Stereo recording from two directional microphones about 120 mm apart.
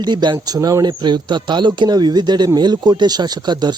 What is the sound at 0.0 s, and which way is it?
Speech, 40° right (ahead or behind).